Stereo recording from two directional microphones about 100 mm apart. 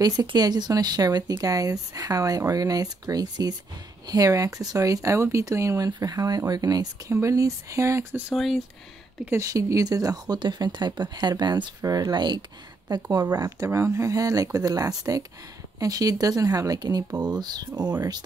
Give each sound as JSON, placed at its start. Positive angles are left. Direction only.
{"t": 0.0, "sound": "speech", "side_deg": -40}
{"t": 7.1, "sound": "speech", "side_deg": -30}
{"t": 8.3, "sound": "speech", "side_deg": 0}
{"t": 9.3, "sound": "speech", "side_deg": -30}
{"t": 13.7, "sound": "speech", "side_deg": -30}